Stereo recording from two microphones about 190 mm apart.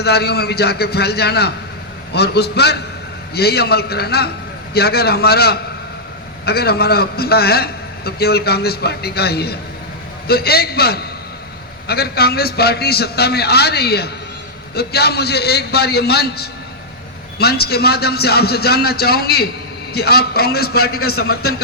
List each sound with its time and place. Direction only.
0.0 s a man's voice: 60° left (ahead or behind)